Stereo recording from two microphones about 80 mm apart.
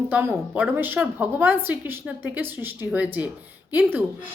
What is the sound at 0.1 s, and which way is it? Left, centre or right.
A woman's voice, right.